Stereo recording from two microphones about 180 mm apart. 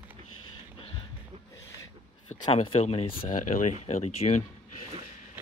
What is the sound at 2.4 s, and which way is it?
Speech, 30° left (ahead or behind).